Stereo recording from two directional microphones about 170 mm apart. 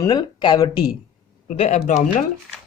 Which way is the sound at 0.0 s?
25° left (ahead or behind).